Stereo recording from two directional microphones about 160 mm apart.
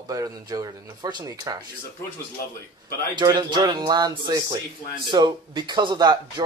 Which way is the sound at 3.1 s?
25° right (ahead or behind).